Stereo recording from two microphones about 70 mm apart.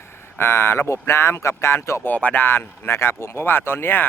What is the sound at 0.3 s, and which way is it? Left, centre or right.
Speech, left.